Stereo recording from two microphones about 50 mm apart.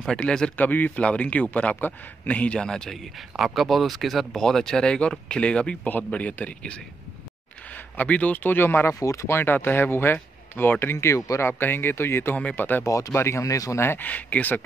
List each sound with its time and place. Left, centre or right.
0.2 s a man's voice: left
0.6 s a man's voice: left
2.6 s speech: centre
2.9 s a man's voice: centre; by 5.8 s left
5.9 s a man's voice: left
9.0 s speech: left
9.4 s speech: left
11.4 s speech: left
12.5 s speech: left
13.1 s speech: left
13.8 s speech: left